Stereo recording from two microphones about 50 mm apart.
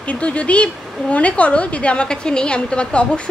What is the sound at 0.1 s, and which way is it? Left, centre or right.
A woman's voice, left.